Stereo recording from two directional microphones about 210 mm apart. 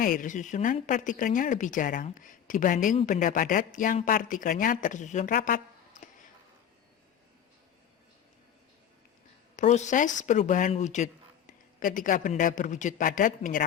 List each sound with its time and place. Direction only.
0.0 s speech: 40° left (ahead or behind)
9.6 s speech: 35° left (ahead or behind)